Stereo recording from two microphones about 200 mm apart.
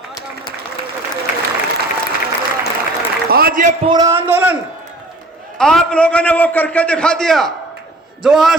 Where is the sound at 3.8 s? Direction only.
20° right (ahead or behind).